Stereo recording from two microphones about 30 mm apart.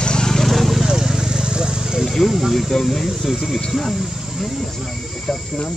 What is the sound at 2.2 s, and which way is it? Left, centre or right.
Speech, centre.